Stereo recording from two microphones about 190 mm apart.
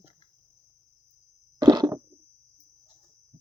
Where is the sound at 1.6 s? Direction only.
20° right (ahead or behind).